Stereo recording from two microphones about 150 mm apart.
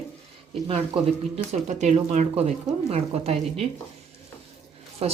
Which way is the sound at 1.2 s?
50° right (ahead or behind).